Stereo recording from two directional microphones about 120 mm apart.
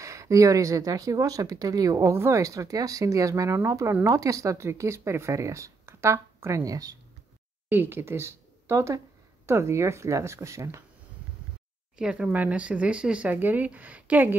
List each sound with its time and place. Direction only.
0.0 s a woman's voice: 25° right (ahead or behind)
7.7 s a woman's voice: 20° right (ahead or behind)
12.0 s speech: 5° right (ahead or behind)